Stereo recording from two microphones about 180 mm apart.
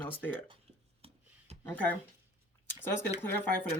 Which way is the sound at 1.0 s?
35° right (ahead or behind).